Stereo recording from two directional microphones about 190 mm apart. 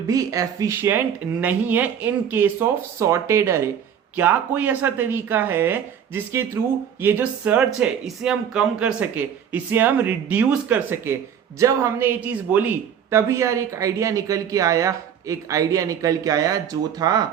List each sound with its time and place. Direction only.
0.1 s a man's voice: 20° right (ahead or behind)